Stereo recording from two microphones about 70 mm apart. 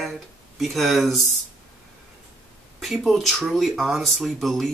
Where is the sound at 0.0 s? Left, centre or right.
Centre.